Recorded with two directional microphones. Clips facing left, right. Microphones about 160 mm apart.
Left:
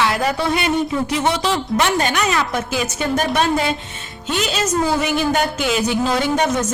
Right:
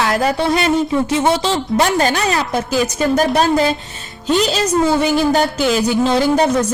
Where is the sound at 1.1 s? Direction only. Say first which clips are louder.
Right 3 dB; 30° right (ahead or behind).